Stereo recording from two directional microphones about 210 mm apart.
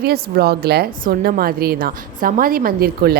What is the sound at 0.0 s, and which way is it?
Speech, 45° right (ahead or behind).